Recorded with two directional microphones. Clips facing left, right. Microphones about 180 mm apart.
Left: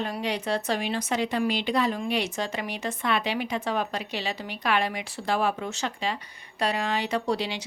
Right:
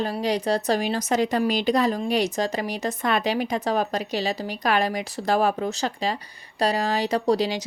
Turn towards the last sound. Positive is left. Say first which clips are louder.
# right 6 dB
turn(degrees=-40)  # may be behind; listen again after turning